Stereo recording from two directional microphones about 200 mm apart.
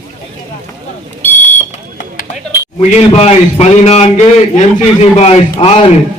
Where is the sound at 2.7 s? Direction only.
30° left (ahead or behind).